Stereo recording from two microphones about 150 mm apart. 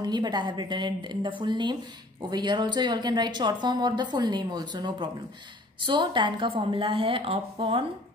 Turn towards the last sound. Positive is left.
turn(degrees=-40)  # may be behind; listen again after turning